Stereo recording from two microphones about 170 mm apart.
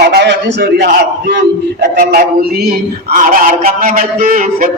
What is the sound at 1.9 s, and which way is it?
Speech, 65° right (ahead or behind).